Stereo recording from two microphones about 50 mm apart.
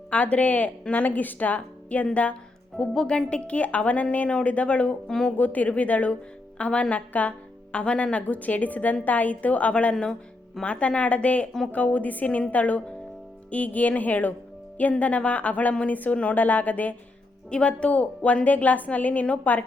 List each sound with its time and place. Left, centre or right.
0.1 s a woman's voice: left
2.7 s a woman's voice: centre
5.0 s a woman's voice: centre
5.4 s a woman's voice: left
6.9 s a woman's voice: left
17.5 s a woman's voice: left